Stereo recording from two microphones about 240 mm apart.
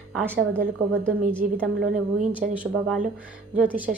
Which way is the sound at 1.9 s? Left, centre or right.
Right.